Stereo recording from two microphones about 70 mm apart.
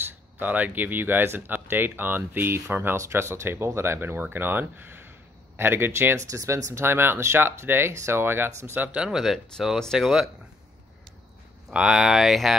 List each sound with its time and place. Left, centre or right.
0.4 s speech: right
6.1 s speech: right
8.7 s speech: centre
9.1 s speech: centre
11.7 s speech: centre